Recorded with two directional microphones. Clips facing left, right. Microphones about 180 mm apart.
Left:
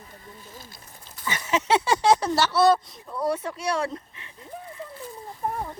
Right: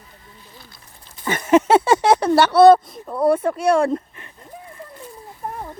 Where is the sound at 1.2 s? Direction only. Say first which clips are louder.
Right 11 dB; 50° right (ahead or behind).